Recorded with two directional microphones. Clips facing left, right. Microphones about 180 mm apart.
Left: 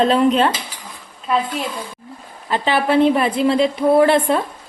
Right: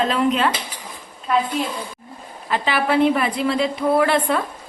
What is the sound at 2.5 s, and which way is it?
A woman's voice, 25° left (ahead or behind).